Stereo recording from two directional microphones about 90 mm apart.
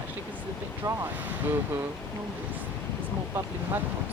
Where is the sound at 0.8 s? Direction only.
50° right (ahead or behind).